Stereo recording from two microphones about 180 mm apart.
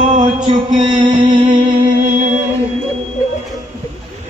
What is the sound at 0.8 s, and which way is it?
Music, 25° right (ahead or behind).